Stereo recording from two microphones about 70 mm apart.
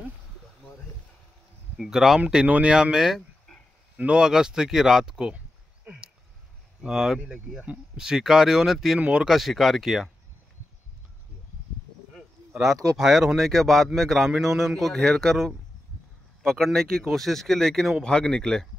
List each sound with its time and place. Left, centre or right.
1.8 s speech: centre
2.2 s speech: centre
6.8 s speech: centre
9.3 s speech: centre
12.9 s speech: centre